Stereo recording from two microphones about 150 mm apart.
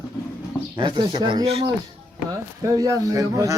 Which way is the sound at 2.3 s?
25° right (ahead or behind).